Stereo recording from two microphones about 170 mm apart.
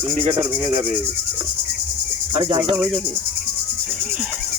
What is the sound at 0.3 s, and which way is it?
Rub, 30° right (ahead or behind).